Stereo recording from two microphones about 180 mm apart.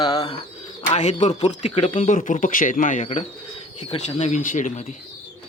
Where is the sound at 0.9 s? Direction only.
35° left (ahead or behind).